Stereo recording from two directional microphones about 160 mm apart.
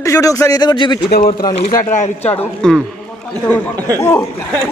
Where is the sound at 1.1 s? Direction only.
65° left (ahead or behind).